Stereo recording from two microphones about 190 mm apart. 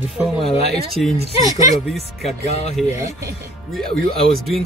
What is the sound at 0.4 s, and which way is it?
Speech, 30° left (ahead or behind).